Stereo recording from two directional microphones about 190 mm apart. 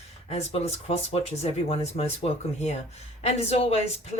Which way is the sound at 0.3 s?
35° left (ahead or behind).